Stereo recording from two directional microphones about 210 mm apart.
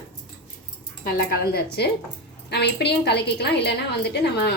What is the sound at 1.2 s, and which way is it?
A woman's voice, 50° left (ahead or behind).